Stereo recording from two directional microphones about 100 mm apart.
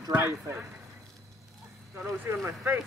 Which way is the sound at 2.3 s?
20° right (ahead or behind).